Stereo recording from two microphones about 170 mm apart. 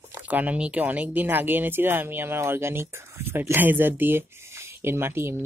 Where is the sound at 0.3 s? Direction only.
10° right (ahead or behind).